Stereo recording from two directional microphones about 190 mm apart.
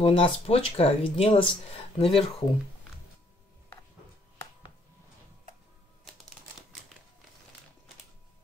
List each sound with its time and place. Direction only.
0.0 s speech: 30° left (ahead or behind)